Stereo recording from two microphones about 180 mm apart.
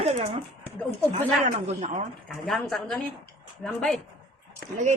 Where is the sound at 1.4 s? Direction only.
45° right (ahead or behind).